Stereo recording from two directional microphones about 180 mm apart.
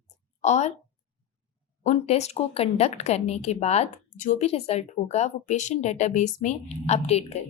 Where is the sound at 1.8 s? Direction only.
40° left (ahead or behind).